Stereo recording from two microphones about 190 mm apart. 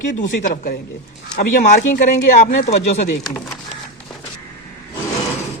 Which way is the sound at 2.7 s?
35° left (ahead or behind).